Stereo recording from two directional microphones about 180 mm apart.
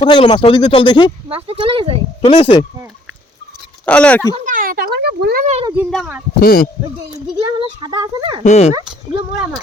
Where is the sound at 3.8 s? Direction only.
5° left (ahead or behind).